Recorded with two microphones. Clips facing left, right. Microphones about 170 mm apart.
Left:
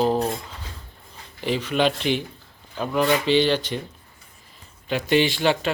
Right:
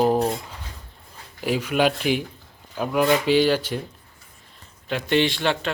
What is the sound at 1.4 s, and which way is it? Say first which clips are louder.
Speech: right 1 dB; 5° right (ahead or behind).